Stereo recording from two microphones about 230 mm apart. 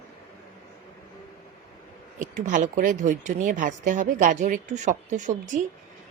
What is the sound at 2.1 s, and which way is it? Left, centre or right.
Speech, right.